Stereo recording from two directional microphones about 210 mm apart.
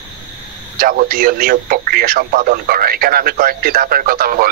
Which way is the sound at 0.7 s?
45° right (ahead or behind).